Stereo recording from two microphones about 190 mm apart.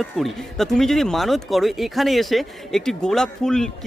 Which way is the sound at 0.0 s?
Centre (ahead or behind).